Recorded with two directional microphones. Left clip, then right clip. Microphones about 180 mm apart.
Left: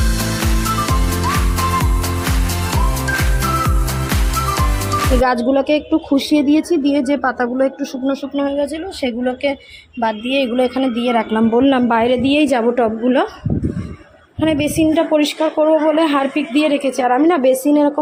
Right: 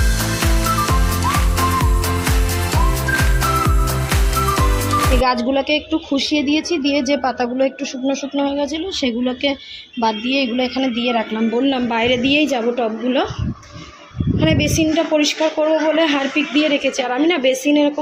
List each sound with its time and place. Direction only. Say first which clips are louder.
5.5 s a woman's voice: left 3 dB; 10° left (ahead or behind)
11.3 s a woman's voice: left 5 dB; 30° left (ahead or behind)
11.9 s a woman's voice: left 2 dB; 15° left (ahead or behind)
14.4 s a woman's voice: left 2 dB; 15° left (ahead or behind)